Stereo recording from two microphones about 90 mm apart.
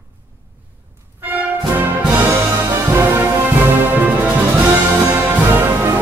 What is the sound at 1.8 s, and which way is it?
Music, 20° right (ahead or behind).